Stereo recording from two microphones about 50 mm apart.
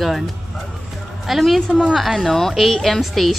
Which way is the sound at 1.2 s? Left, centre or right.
Centre.